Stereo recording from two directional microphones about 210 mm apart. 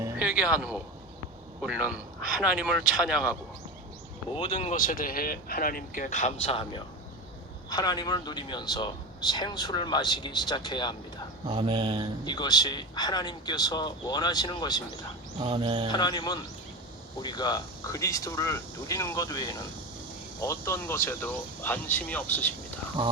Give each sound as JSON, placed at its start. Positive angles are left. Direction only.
{"t": 0.0, "sound": "music", "side_deg": -10}
{"t": 1.6, "sound": "speech", "side_deg": -5}
{"t": 4.3, "sound": "speech", "side_deg": 25}
{"t": 4.7, "sound": "speech", "side_deg": 40}
{"t": 11.4, "sound": "speech", "side_deg": -25}
{"t": 12.2, "sound": "speech", "side_deg": 20}
{"t": 15.4, "sound": "speech", "side_deg": -20}
{"t": 15.9, "sound": "speech", "side_deg": 20}